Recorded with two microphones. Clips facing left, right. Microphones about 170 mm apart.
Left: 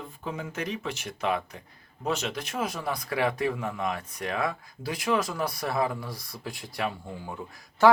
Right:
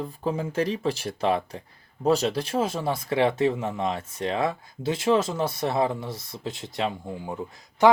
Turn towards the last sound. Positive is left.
turn(degrees=-15)  # may be behind; listen again after turning